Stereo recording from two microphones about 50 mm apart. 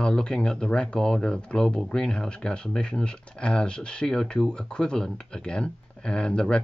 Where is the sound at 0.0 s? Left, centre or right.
Centre.